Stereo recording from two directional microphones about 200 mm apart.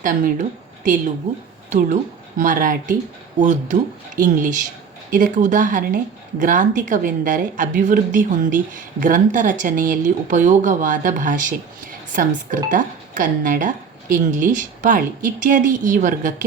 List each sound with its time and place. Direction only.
0.0 s a woman's voice: 40° right (ahead or behind)
2.4 s a woman's voice: 40° right (ahead or behind)